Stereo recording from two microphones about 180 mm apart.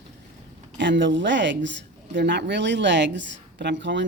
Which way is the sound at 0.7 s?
85° right.